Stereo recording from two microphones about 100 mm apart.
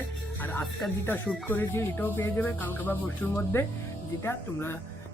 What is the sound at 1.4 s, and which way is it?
Speech, 20° left (ahead or behind).